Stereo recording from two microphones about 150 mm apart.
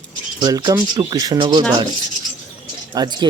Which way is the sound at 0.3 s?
30° right (ahead or behind).